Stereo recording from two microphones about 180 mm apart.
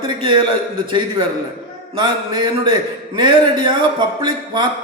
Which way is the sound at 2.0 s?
25° right (ahead or behind).